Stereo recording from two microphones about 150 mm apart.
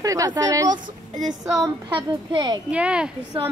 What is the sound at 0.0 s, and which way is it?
Speech, 20° right (ahead or behind).